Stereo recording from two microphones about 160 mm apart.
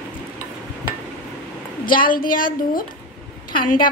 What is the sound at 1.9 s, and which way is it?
A woman's voice, 60° left (ahead or behind).